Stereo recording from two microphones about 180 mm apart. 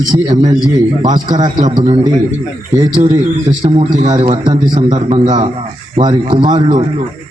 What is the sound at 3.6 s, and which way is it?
A man's voice, 35° right (ahead or behind).